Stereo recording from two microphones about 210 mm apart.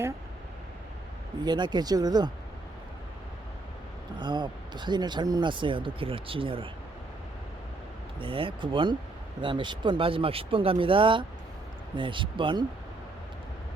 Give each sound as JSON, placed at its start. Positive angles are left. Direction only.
{"t": 1.5, "sound": "speech", "side_deg": -20}
{"t": 4.2, "sound": "speech", "side_deg": -20}
{"t": 8.2, "sound": "speech", "side_deg": -25}